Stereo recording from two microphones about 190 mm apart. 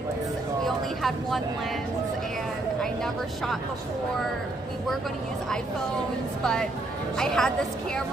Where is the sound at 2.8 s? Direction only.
Centre (ahead or behind).